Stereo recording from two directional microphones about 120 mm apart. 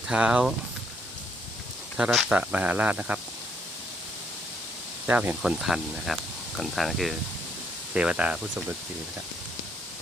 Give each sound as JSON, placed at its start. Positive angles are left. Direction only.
{"t": 0.1, "sound": "speech", "side_deg": -10}
{"t": 2.0, "sound": "speech", "side_deg": -5}
{"t": 5.0, "sound": "speech", "side_deg": -15}